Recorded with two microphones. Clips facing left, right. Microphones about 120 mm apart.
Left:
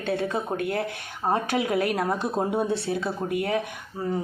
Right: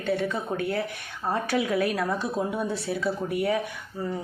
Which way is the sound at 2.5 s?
25° left (ahead or behind).